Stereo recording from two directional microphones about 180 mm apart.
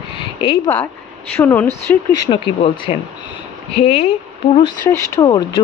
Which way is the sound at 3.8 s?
35° left (ahead or behind).